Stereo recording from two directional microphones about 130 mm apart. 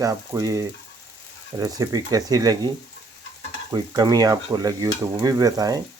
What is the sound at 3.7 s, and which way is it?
Stir, 30° right (ahead or behind).